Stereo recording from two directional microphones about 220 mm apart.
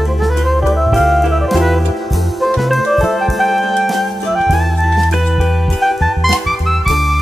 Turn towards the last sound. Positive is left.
turn(degrees=0)  # may be behind; listen again after turning